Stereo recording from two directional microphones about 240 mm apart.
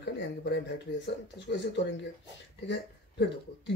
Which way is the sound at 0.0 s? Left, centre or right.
Left.